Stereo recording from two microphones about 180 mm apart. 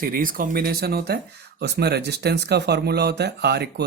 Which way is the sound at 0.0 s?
50° right (ahead or behind).